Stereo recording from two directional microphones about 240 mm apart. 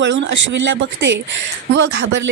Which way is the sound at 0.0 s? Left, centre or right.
Right.